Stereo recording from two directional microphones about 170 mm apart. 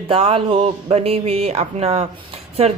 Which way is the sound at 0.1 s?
35° right (ahead or behind).